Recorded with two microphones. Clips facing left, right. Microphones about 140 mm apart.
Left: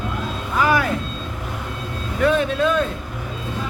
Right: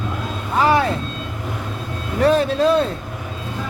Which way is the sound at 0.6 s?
30° right (ahead or behind).